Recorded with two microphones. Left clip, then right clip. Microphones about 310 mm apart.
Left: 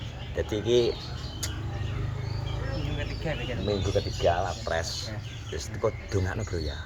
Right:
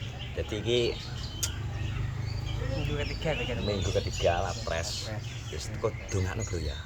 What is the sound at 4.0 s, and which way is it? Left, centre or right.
Speech, centre.